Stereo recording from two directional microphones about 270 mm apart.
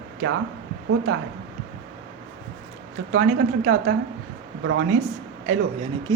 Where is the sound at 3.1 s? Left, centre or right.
Right.